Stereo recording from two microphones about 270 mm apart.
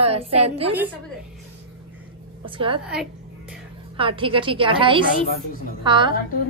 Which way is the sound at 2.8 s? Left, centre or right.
Centre.